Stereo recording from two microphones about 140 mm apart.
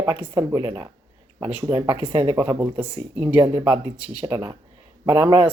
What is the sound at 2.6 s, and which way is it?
A woman's voice, 10° right (ahead or behind).